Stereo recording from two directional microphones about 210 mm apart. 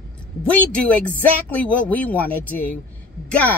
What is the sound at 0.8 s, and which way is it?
Speech, 10° left (ahead or behind).